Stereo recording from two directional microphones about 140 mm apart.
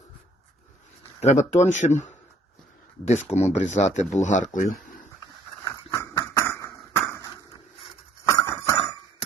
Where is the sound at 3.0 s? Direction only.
50° left (ahead or behind).